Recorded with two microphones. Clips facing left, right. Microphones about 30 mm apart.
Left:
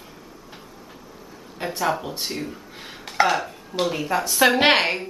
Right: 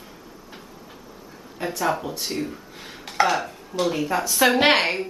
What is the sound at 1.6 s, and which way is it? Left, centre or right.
Speech, left.